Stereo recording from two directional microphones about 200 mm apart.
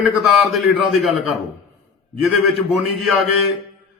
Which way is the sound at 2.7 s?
Centre (ahead or behind).